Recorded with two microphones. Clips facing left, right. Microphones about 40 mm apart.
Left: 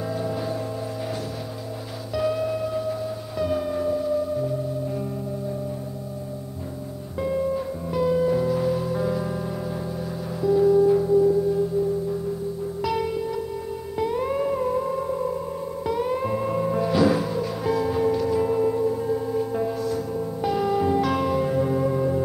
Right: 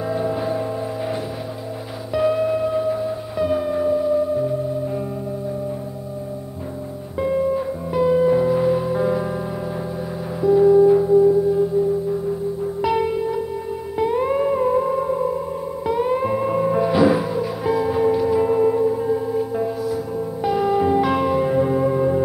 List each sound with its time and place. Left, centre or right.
0.1 s music: centre
2.1 s music: centre
7.2 s music: centre
10.4 s music: centre